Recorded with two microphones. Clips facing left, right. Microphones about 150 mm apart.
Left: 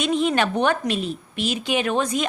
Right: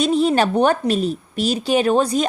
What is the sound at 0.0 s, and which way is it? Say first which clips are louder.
A woman's voice: right 4 dB; 35° right (ahead or behind).